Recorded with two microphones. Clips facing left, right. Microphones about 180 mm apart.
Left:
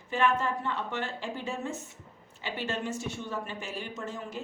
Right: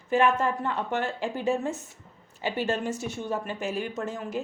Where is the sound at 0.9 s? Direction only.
45° right (ahead or behind).